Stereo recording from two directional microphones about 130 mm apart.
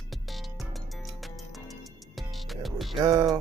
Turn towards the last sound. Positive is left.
turn(degrees=-25)  # may be behind; listen again after turning